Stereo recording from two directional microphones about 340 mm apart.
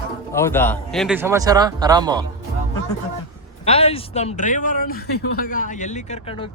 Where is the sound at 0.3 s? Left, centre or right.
Centre.